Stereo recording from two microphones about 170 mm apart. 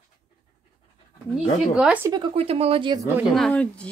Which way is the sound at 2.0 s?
25° right (ahead or behind).